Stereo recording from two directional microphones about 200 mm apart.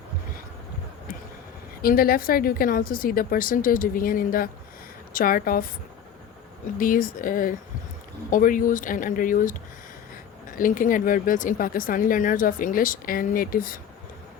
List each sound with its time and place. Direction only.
1.8 s speech: 45° left (ahead or behind)
6.7 s speech: 45° left (ahead or behind)